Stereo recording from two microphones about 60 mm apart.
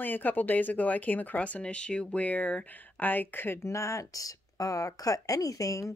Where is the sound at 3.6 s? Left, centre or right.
Left.